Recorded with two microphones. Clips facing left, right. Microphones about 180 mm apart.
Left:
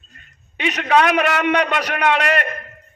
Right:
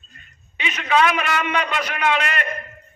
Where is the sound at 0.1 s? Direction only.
65° left (ahead or behind).